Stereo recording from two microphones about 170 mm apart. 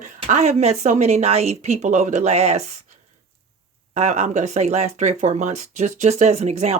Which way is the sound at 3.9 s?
45° right (ahead or behind).